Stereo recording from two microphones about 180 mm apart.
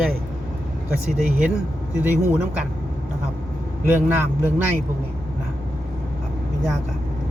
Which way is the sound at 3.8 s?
10° right (ahead or behind).